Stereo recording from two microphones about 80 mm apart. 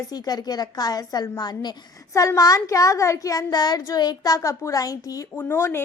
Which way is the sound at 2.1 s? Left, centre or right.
Left.